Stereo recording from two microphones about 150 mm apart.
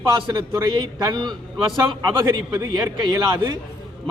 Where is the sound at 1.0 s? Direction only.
30° right (ahead or behind).